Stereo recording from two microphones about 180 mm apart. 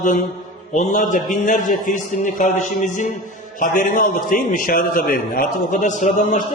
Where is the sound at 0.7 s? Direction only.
40° left (ahead or behind).